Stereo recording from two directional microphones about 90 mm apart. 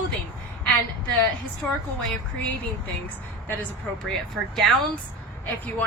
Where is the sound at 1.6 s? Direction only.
10° left (ahead or behind).